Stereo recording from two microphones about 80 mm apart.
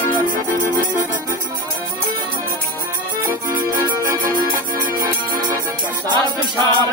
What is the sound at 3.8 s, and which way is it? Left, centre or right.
Music, right.